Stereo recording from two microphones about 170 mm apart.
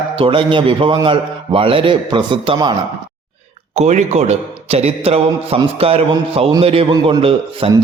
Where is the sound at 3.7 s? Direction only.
40° right (ahead or behind).